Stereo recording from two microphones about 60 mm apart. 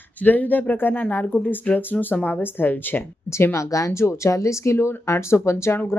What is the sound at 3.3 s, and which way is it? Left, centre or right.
Speech, left.